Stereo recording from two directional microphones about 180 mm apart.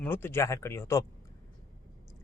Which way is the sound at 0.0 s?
10° left (ahead or behind).